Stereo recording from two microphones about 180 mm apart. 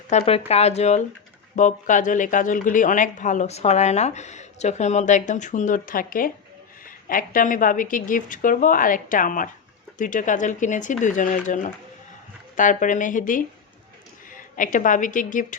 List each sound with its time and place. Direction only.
0.1 s a woman's voice: 35° left (ahead or behind)